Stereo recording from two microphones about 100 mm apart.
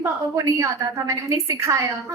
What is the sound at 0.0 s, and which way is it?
A woman's voice, 30° right (ahead or behind).